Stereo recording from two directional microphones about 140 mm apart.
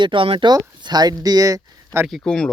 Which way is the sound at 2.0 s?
5° left (ahead or behind).